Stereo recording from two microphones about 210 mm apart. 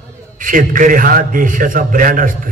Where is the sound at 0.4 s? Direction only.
40° right (ahead or behind).